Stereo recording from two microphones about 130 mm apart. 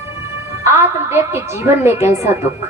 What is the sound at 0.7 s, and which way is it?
A woman's voice, 20° right (ahead or behind).